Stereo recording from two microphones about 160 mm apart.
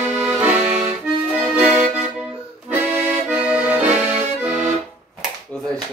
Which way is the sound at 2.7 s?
10° right (ahead or behind).